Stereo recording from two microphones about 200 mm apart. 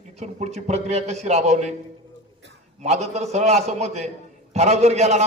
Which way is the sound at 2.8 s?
35° right (ahead or behind).